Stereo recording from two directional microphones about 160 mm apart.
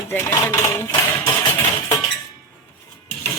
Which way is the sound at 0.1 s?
15° left (ahead or behind).